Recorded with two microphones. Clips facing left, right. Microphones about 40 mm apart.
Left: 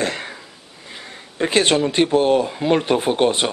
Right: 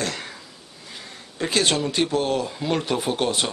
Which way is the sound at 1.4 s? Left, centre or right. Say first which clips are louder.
Left 5 dB; left.